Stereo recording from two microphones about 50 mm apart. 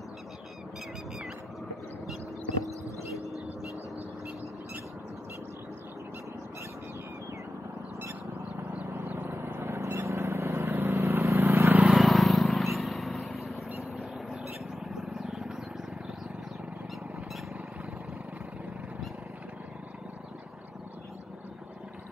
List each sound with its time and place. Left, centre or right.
8.9 s vehicle: right
9.7 s vehicle: right
11.0 s vehicle: right
11.3 s vehicle: right
11.9 s vehicle: centre
14.3 s a sound: centre